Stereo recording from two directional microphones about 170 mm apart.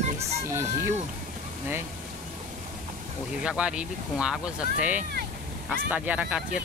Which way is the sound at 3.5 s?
5° right (ahead or behind).